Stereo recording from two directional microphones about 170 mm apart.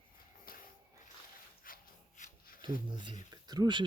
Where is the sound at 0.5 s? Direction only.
60° left (ahead or behind).